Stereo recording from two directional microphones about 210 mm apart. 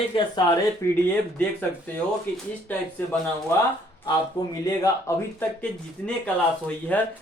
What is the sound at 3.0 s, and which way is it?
Speech, 10° left (ahead or behind).